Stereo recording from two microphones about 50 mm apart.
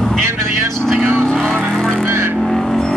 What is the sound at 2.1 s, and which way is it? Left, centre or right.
Vehicle, right.